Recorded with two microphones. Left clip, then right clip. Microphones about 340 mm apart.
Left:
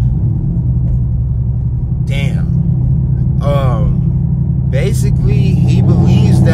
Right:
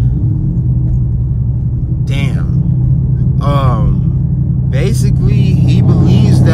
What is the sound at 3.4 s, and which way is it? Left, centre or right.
Speech, centre.